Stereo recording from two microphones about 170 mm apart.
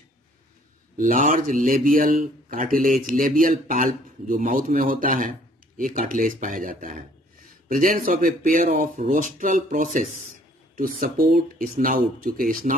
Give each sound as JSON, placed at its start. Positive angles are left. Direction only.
{"t": 0.9, "sound": "a man's voice", "side_deg": -50}